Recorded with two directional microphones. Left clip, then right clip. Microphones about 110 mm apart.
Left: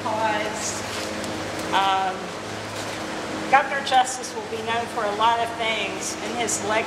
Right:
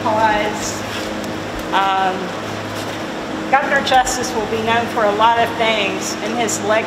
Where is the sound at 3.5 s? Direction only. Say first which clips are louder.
Right 5 dB; 30° left (ahead or behind).